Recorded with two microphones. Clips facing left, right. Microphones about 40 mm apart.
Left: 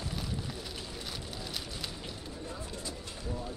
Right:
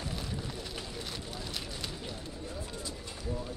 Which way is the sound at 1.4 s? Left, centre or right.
Centre.